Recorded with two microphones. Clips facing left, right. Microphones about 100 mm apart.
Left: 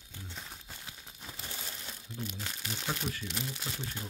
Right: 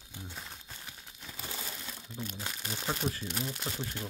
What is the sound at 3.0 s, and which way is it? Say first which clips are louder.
Speech: right 3 dB; 30° right (ahead or behind).